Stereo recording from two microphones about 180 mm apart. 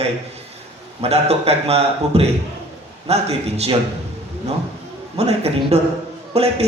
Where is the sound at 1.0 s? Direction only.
35° right (ahead or behind).